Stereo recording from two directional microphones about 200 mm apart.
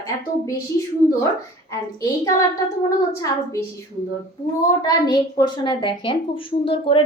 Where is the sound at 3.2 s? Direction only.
15° left (ahead or behind).